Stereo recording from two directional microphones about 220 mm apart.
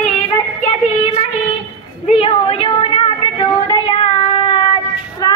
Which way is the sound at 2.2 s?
25° left (ahead or behind).